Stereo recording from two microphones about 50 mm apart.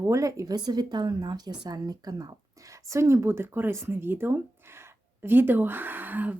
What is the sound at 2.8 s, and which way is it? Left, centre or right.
Speech, right.